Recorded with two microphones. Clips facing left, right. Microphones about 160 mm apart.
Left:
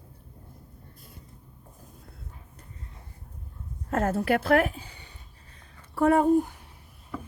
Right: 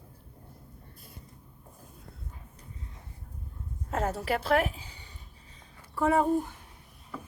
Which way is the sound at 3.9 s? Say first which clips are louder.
Left 5 dB; 55° left (ahead or behind).